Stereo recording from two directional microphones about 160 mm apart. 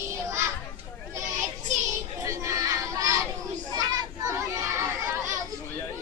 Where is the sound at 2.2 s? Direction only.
20° right (ahead or behind).